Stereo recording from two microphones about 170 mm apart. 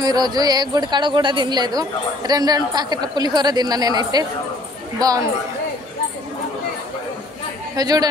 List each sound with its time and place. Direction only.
0.0 s a woman's voice: 25° right (ahead or behind)
7.7 s a woman's voice: 25° right (ahead or behind)